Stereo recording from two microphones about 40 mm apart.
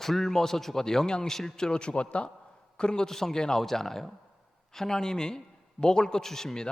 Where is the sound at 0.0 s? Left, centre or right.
Centre; by 2.3 s left.